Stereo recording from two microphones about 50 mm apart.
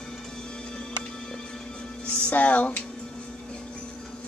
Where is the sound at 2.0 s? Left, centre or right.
Left.